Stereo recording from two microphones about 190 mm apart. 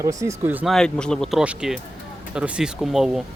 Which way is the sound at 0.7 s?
5° left (ahead or behind).